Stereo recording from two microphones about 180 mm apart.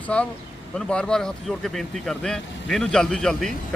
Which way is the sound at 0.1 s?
5° left (ahead or behind).